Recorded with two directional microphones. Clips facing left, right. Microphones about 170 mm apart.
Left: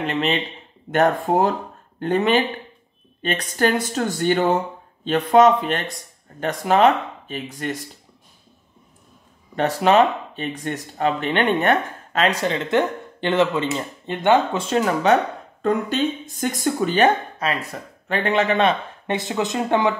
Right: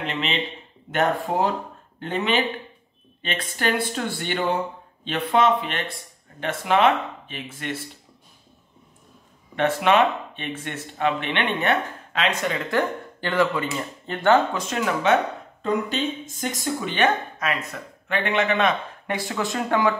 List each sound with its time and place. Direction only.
0.0 s speech: 45° left (ahead or behind)
2.0 s speech: 45° left (ahead or behind)
9.6 s speech: 35° left (ahead or behind); by 14.6 s 20° left (ahead or behind)
14.6 s speech: 35° left (ahead or behind)
15.6 s speech: 45° left (ahead or behind); by 19.9 s 20° left (ahead or behind)